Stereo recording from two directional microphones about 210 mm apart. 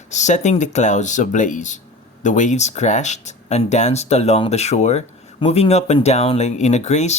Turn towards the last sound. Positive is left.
turn(degrees=30)  # may be behind; listen again after turning